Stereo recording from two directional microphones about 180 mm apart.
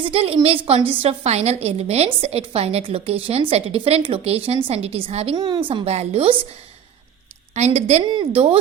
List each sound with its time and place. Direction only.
0.0 s a woman's voice: 30° right (ahead or behind)
7.5 s a woman's voice: 40° right (ahead or behind)